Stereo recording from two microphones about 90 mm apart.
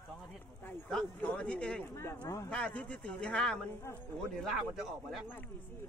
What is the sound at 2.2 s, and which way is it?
Speech, 35° left (ahead or behind).